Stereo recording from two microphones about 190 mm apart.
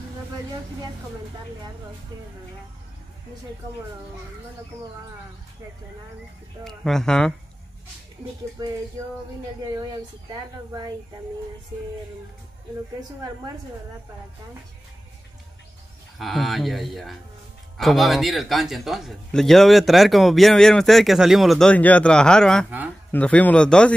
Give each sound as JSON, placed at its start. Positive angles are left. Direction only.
{"t": 6.6, "sound": "speech", "side_deg": 0}
{"t": 8.6, "sound": "speech", "side_deg": -20}
{"t": 16.2, "sound": "speech", "side_deg": 0}